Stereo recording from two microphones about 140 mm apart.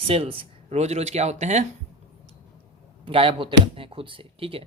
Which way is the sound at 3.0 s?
40° right (ahead or behind).